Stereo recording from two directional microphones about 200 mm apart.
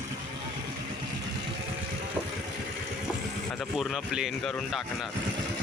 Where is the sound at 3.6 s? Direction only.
Centre (ahead or behind).